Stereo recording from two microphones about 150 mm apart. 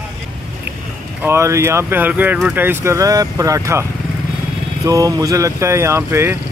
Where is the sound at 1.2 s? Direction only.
15° right (ahead or behind).